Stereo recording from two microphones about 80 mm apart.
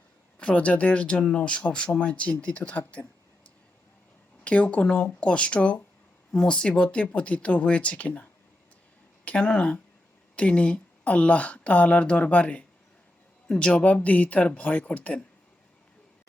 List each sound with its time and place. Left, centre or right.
0.3 s speech: centre
4.4 s speech: centre